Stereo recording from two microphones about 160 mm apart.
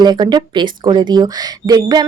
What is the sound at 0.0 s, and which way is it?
Speech, 25° right (ahead or behind).